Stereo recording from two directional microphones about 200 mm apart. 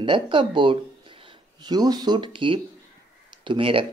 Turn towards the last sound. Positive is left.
turn(degrees=-25)  # may be behind; listen again after turning